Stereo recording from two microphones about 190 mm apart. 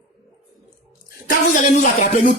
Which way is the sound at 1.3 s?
45° left (ahead or behind).